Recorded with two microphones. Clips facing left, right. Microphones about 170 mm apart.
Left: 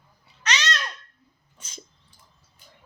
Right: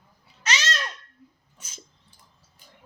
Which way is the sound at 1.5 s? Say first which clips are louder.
Left 4 dB; 10° right (ahead or behind).